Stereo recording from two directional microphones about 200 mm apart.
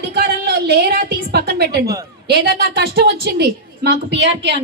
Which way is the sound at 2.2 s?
55° right (ahead or behind).